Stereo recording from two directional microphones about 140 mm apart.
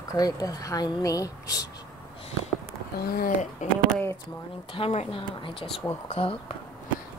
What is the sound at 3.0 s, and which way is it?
Speech, 90° left.